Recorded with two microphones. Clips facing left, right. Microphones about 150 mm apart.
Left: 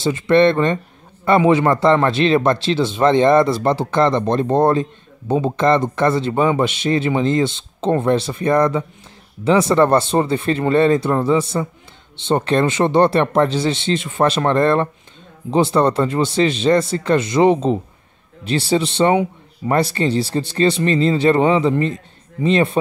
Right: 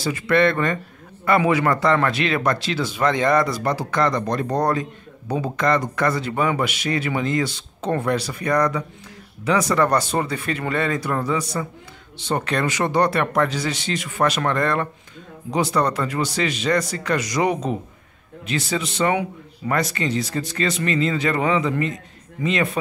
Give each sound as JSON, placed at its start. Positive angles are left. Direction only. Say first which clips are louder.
{"t": 0.0, "sound": "speech", "louder": "left 5 dB", "side_deg": 25}